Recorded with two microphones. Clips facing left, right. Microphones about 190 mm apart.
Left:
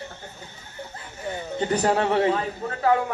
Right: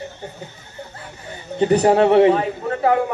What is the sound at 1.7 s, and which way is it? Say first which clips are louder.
Speech: right 8 dB; 65° right (ahead or behind).